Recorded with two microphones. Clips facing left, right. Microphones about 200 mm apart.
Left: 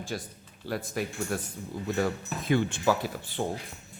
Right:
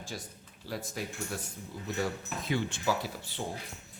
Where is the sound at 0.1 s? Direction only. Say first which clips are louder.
Left 6 dB; 65° left (ahead or behind).